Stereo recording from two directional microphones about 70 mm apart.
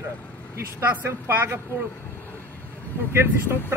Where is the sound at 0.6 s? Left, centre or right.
Right.